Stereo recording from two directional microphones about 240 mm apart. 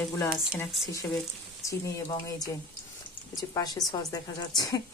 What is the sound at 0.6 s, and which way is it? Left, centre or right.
Speech, centre.